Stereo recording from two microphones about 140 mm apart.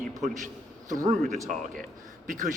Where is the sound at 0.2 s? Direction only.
65° right (ahead or behind).